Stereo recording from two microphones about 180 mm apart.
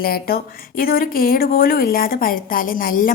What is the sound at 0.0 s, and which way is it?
Speech, 55° left (ahead or behind).